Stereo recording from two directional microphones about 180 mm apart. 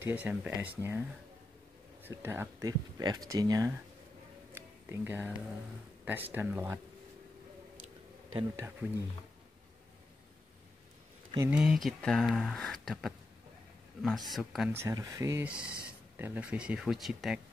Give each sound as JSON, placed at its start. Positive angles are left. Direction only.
{"t": 0.0, "sound": "speech", "side_deg": -10}
{"t": 2.0, "sound": "speech", "side_deg": -10}
{"t": 4.5, "sound": "music", "side_deg": -10}
{"t": 6.0, "sound": "speech", "side_deg": -10}
{"t": 8.5, "sound": "speech", "side_deg": -15}
{"t": 11.5, "sound": "speech", "side_deg": 0}
{"t": 14.7, "sound": "speech", "side_deg": -15}